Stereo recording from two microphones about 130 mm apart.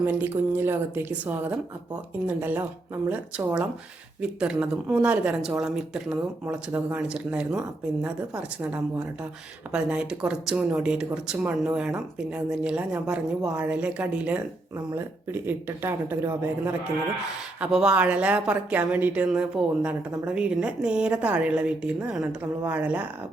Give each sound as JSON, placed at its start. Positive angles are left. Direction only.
{"t": 0.0, "sound": "a woman's voice", "side_deg": -15}
{"t": 4.2, "sound": "a woman's voice", "side_deg": -10}
{"t": 17.6, "sound": "a woman's voice", "side_deg": -5}